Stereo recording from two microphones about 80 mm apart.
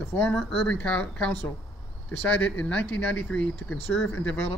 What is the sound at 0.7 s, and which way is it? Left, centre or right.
Speech, centre.